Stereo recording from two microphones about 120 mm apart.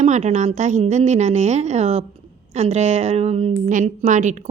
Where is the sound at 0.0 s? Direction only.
70° right (ahead or behind).